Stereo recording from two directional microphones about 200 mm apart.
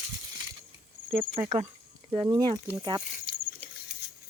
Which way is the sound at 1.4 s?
35° right (ahead or behind).